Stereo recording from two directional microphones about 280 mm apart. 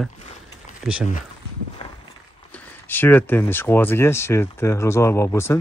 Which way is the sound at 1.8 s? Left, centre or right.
Centre.